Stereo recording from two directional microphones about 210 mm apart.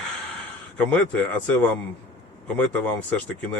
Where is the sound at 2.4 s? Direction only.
5° left (ahead or behind).